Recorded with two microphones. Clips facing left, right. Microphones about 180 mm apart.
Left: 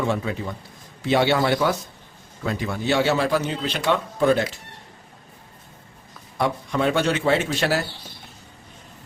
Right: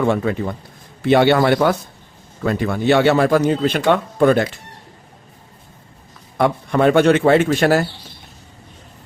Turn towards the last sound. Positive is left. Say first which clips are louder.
# right 8 dB
turn(degrees=-50)  # may be behind; listen again after turning